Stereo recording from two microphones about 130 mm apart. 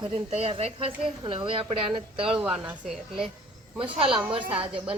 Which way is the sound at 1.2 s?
40° right (ahead or behind).